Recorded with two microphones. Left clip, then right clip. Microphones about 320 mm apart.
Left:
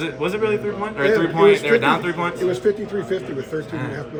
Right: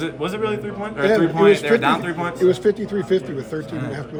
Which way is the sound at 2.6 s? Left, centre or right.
Right.